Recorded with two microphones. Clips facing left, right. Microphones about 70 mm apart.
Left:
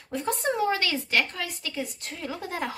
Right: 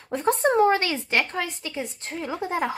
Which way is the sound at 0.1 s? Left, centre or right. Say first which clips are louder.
Right 6 dB; right.